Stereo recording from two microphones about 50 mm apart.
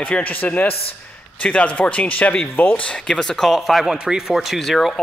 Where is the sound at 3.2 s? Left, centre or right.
Centre.